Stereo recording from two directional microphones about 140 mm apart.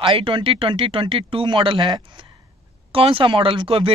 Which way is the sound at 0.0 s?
40° right (ahead or behind).